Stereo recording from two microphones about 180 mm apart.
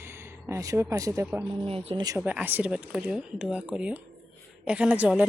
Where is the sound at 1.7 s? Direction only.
30° right (ahead or behind).